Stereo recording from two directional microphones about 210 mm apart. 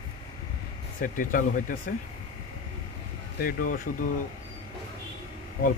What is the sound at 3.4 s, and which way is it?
Speech, 45° left (ahead or behind).